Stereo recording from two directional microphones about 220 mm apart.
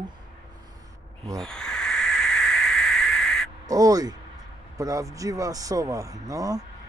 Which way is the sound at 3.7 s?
15° right (ahead or behind).